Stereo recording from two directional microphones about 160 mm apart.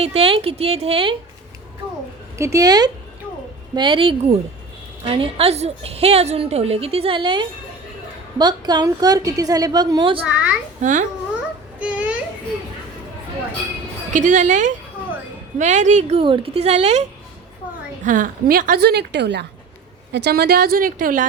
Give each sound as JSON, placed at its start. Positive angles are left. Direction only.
{"t": 0.0, "sound": "speech", "side_deg": -40}
{"t": 2.4, "sound": "a woman's voice", "side_deg": -20}
{"t": 10.2, "sound": "a child's voice", "side_deg": -5}
{"t": 10.8, "sound": "a woman's voice", "side_deg": -45}
{"t": 11.8, "sound": "a sound", "side_deg": -10}
{"t": 14.1, "sound": "a woman's voice", "side_deg": -50}
{"t": 18.0, "sound": "a woman's voice", "side_deg": -55}